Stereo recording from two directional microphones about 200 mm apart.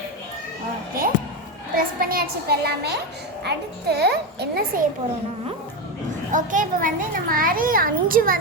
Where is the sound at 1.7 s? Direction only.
45° right (ahead or behind).